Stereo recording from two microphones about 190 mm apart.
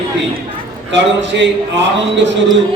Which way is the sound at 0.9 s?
70° right (ahead or behind).